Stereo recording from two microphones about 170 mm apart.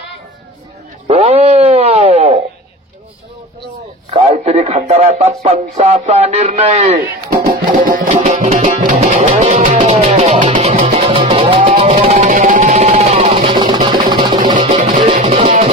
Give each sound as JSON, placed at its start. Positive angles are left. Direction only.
{"t": 1.0, "sound": "a sound", "side_deg": -40}
{"t": 4.1, "sound": "speech", "side_deg": -40}
{"t": 7.3, "sound": "music", "side_deg": -55}
{"t": 8.5, "sound": "speech", "side_deg": -40}
{"t": 8.8, "sound": "music", "side_deg": -50}
{"t": 14.4, "sound": "music", "side_deg": -50}
{"t": 15.1, "sound": "music", "side_deg": -40}